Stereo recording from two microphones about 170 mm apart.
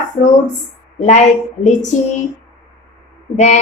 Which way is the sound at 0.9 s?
45° left (ahead or behind).